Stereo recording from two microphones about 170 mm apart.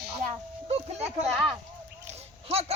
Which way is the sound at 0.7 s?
40° right (ahead or behind).